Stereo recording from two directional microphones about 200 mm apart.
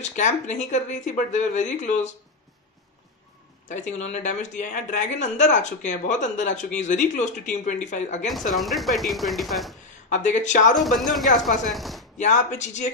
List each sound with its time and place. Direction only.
0.0 s speech: 35° left (ahead or behind)
3.6 s speech: 35° left (ahead or behind)
8.3 s speech: centre (ahead or behind)
10.0 s speech: 40° left (ahead or behind)
10.8 s speech: centre (ahead or behind)
12.2 s speech: 35° left (ahead or behind)